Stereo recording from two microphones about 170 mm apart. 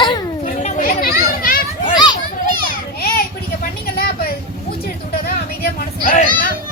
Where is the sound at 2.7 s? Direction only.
60° left (ahead or behind).